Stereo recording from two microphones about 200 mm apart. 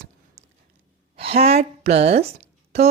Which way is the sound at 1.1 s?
30° right (ahead or behind).